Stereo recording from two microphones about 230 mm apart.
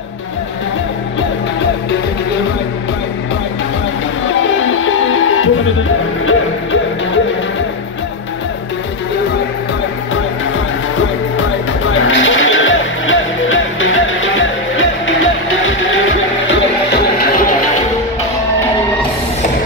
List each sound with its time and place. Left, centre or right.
4.6 s music: left
11.3 s music: left